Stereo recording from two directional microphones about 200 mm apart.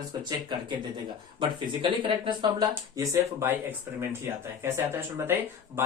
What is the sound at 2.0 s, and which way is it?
Speech, 25° right (ahead or behind).